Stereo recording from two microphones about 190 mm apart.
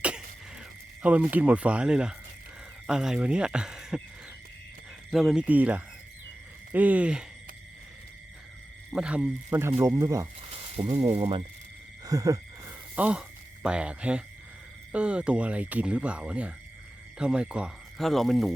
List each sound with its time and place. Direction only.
1.0 s speech: 10° right (ahead or behind)
5.1 s speech: centre (ahead or behind)
8.9 s speech: 5° right (ahead or behind)
10.5 s speech: 30° right (ahead or behind)
12.0 s a sound: 15° right (ahead or behind)
14.9 s speech: 5° right (ahead or behind)